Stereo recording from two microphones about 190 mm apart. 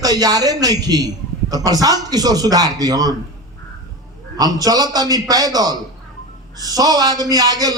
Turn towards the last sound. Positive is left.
turn(degrees=-20)  # may be behind; listen again after turning